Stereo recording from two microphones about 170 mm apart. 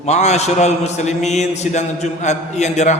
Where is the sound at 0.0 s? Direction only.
40° left (ahead or behind).